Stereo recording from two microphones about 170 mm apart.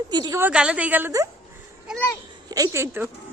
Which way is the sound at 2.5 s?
20° right (ahead or behind).